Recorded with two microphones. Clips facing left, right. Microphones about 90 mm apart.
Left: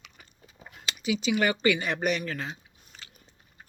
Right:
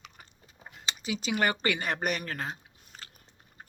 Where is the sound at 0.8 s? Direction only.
30° right (ahead or behind).